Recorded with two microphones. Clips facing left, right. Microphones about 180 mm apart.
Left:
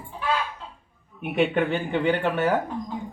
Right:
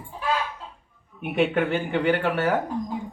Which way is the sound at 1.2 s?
Centre (ahead or behind).